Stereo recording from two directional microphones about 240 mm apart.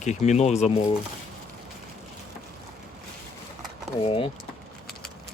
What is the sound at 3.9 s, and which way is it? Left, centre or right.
Speech, left.